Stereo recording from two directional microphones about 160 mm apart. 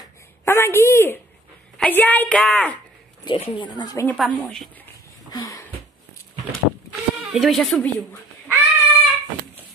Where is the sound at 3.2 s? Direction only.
35° left (ahead or behind).